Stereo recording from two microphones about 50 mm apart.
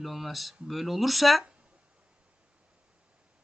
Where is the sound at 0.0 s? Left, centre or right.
Centre.